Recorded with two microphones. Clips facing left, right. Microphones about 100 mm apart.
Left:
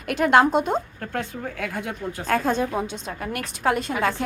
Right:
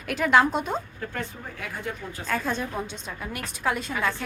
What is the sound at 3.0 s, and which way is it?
A woman's voice, 75° left (ahead or behind).